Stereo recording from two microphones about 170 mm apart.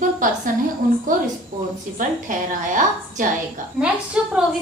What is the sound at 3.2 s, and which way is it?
Speech, 50° right (ahead or behind).